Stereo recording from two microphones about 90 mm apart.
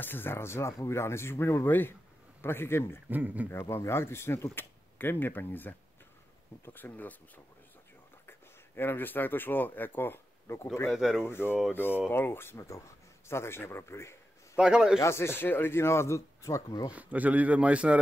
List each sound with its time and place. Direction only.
0.0 s speech: 25° left (ahead or behind)
3.1 s speech: 20° right (ahead or behind)
3.4 s speech: 30° left (ahead or behind)
8.3 s speech: 25° left (ahead or behind)
10.9 s speech: 5° right (ahead or behind)
11.2 s speech: 25° left (ahead or behind)
14.6 s speech: 5° right (ahead or behind)
15.0 s speech: 30° left (ahead or behind)
16.9 s speech: 15° right (ahead or behind)